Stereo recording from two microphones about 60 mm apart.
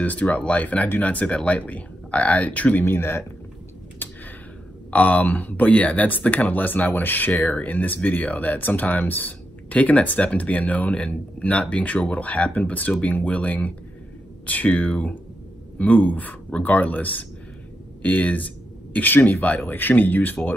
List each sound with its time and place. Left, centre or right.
0.0 s speech: left
2.8 s speech: left
4.0 s a sound: left
4.9 s speech: left